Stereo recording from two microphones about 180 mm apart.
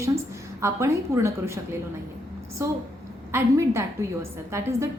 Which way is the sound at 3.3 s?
15° right (ahead or behind).